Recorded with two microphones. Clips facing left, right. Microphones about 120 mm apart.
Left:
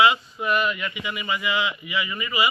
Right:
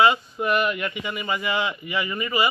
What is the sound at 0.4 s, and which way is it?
Speech, 50° right (ahead or behind).